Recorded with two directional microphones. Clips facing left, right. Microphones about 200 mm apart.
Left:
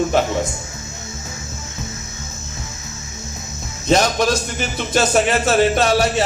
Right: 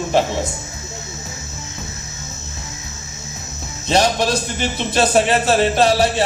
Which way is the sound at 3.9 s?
30° right (ahead or behind).